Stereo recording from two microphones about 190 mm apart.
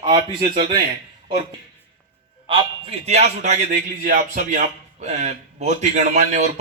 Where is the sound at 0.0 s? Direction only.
20° right (ahead or behind).